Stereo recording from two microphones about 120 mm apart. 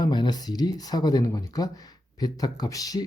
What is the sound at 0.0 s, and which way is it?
Speech, 35° left (ahead or behind).